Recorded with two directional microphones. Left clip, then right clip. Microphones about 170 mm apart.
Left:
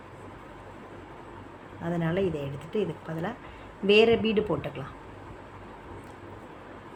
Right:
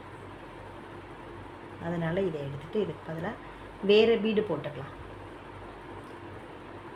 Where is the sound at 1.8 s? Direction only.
20° left (ahead or behind).